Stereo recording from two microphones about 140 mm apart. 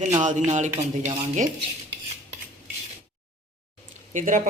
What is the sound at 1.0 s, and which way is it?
Speech, 45° right (ahead or behind).